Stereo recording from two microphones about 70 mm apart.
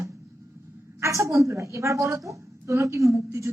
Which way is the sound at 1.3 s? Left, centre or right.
Right.